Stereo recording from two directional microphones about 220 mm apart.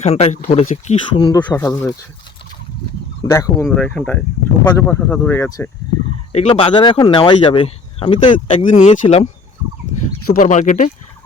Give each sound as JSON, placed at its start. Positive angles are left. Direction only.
{"t": 0.0, "sound": "speech", "side_deg": 30}
{"t": 1.2, "sound": "speech", "side_deg": 20}
{"t": 3.2, "sound": "speech", "side_deg": 15}
{"t": 6.3, "sound": "speech", "side_deg": 25}
{"t": 10.3, "sound": "speech", "side_deg": 35}